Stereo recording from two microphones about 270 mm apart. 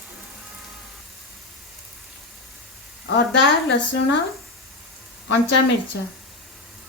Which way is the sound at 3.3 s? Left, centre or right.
Left.